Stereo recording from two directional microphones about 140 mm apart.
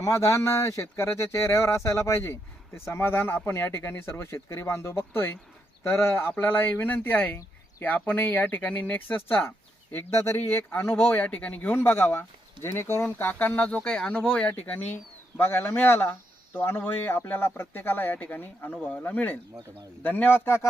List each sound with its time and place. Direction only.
0.0 s speech: 20° left (ahead or behind)